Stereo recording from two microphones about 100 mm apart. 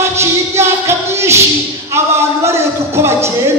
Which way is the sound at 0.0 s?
25° right (ahead or behind).